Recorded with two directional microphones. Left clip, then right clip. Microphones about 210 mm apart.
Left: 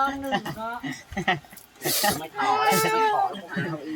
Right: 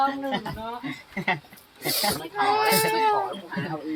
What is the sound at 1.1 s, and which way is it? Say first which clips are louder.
Speech: left 1 dB; 15° left (ahead or behind).